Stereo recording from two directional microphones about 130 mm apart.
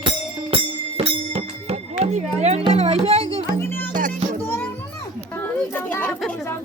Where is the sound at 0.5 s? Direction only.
45° right (ahead or behind).